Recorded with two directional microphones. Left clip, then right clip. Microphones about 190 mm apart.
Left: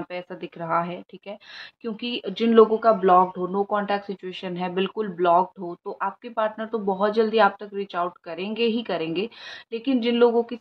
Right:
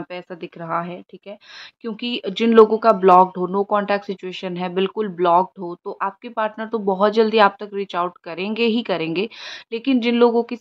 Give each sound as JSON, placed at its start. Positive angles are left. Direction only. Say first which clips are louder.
{"t": 0.1, "sound": "speech", "louder": "right 2 dB", "side_deg": -25}